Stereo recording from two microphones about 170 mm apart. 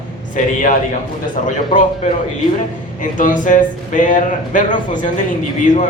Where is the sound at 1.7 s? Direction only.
50° left (ahead or behind).